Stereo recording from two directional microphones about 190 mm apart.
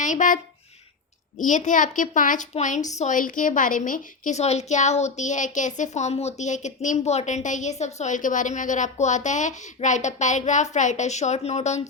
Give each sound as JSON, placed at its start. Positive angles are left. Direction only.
{"t": 0.0, "sound": "speech", "side_deg": 40}
{"t": 1.4, "sound": "a woman's voice", "side_deg": 40}